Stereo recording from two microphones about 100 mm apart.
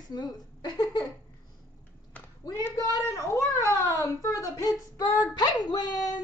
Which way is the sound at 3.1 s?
30° left (ahead or behind).